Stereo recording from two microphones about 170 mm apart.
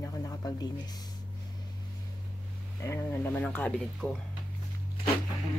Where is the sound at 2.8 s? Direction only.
15° left (ahead or behind).